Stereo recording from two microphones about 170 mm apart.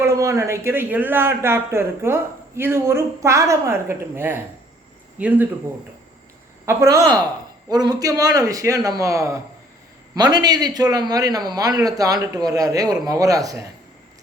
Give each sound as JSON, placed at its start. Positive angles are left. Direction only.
{"t": 0.0, "sound": "speech", "side_deg": -15}
{"t": 6.7, "sound": "a man's voice", "side_deg": -20}